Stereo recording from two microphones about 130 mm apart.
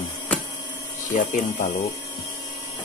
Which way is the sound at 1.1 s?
75° left (ahead or behind).